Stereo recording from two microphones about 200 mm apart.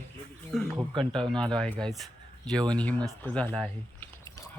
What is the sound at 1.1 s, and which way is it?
Speech, 5° left (ahead or behind).